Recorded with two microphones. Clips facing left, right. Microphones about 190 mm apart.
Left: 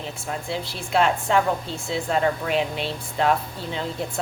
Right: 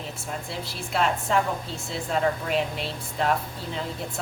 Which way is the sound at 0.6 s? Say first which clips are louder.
Left 4 dB; centre (ahead or behind).